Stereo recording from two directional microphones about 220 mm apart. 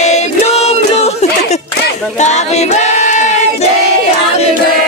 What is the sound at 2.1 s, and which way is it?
Music, 30° left (ahead or behind).